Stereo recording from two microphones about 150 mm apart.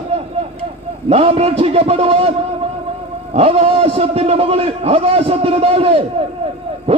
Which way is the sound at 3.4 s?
40° right (ahead or behind).